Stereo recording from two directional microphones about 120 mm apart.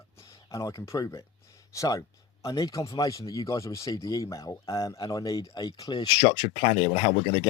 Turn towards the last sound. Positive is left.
turn(degrees=55)  # may be behind; listen again after turning